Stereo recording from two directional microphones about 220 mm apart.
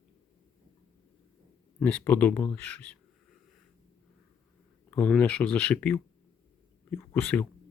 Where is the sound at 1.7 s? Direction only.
5° left (ahead or behind).